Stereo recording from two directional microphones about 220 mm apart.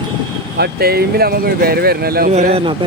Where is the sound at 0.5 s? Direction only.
45° right (ahead or behind).